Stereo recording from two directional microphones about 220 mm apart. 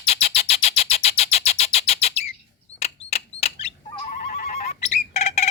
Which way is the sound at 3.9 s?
35° left (ahead or behind).